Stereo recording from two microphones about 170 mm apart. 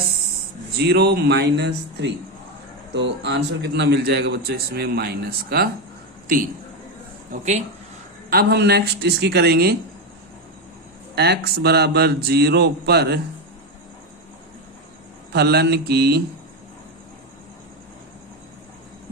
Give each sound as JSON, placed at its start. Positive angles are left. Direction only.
{"t": 0.8, "sound": "a man's voice", "side_deg": -75}
{"t": 6.2, "sound": "a man's voice", "side_deg": -55}
{"t": 7.3, "sound": "speech", "side_deg": -45}
{"t": 8.3, "sound": "a man's voice", "side_deg": -70}
{"t": 11.1, "sound": "a man's voice", "side_deg": -75}
{"t": 15.3, "sound": "a man's voice", "side_deg": -75}